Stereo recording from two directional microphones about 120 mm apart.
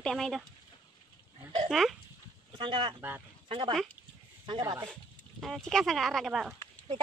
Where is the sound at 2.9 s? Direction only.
15° right (ahead or behind).